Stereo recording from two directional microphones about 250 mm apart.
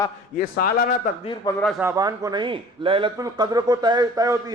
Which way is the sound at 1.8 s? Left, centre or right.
Centre.